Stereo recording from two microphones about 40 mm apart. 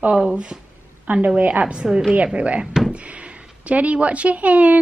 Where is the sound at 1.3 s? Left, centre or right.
Right.